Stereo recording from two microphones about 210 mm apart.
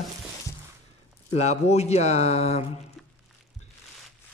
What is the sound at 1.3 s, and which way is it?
A man's voice, 30° left (ahead or behind).